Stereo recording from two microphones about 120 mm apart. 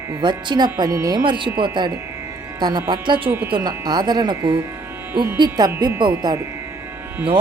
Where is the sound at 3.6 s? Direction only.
35° right (ahead or behind).